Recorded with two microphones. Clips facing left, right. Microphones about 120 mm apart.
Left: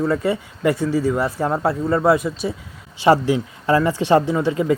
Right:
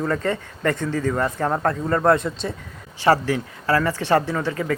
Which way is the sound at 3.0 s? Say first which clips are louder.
Left 3 dB; 15° left (ahead or behind).